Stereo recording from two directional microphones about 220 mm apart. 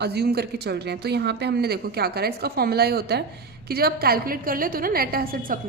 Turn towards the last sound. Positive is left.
turn(degrees=-40)  # may be behind; listen again after turning